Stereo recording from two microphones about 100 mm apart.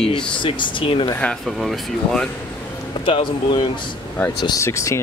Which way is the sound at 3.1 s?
55° left (ahead or behind).